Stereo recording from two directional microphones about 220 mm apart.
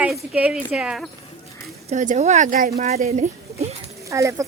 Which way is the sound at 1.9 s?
35° right (ahead or behind).